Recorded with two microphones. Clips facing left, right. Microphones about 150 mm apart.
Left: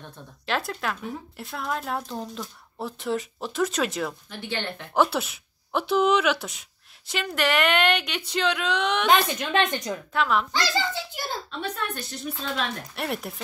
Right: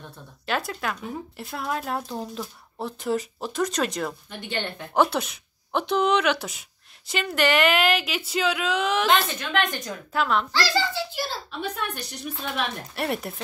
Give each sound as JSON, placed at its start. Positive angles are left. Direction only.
{"t": 0.5, "sound": "speech", "side_deg": 0}
{"t": 9.4, "sound": "a woman's voice", "side_deg": 20}
{"t": 10.1, "sound": "speech", "side_deg": 0}
{"t": 10.5, "sound": "a woman's voice", "side_deg": 20}
{"t": 11.6, "sound": "a woman's voice", "side_deg": -10}
{"t": 12.9, "sound": "speech", "side_deg": 0}